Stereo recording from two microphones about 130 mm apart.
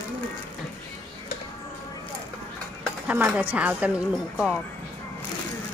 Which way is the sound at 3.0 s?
10° right (ahead or behind).